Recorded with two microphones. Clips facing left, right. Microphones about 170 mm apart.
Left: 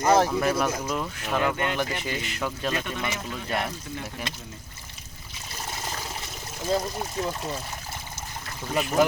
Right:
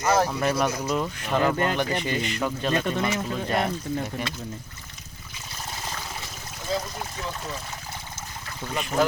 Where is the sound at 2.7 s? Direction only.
35° right (ahead or behind).